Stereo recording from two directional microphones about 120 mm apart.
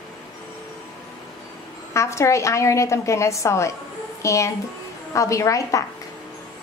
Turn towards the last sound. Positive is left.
turn(degrees=25)  # may be behind; listen again after turning